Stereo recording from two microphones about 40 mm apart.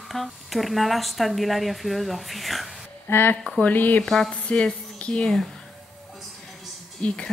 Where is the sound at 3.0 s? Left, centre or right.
Left.